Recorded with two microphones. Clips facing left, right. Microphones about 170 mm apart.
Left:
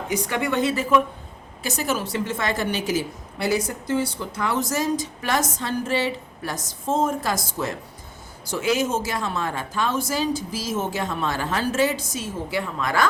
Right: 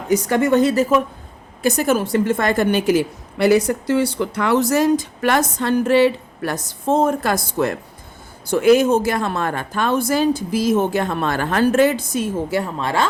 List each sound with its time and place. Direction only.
0.1 s a woman's voice: 45° right (ahead or behind)
1.6 s a woman's voice: 55° right (ahead or behind); by 13.1 s 30° right (ahead or behind)